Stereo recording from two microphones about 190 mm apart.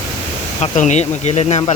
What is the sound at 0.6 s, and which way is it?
Speech, 40° left (ahead or behind).